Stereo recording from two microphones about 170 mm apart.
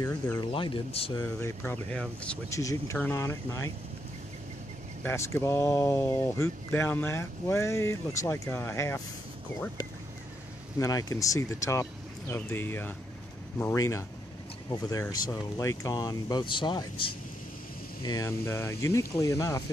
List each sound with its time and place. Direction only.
0.0 s speech: 15° left (ahead or behind)
0.5 s speech: 30° left (ahead or behind)
1.2 s speech: 15° left (ahead or behind)
2.5 s speech: 20° left (ahead or behind)
5.0 s speech: 15° left (ahead or behind)
10.8 s speech: 20° left (ahead or behind)